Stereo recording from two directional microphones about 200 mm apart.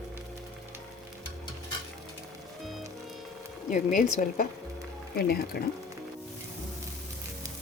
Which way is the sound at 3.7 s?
40° left (ahead or behind).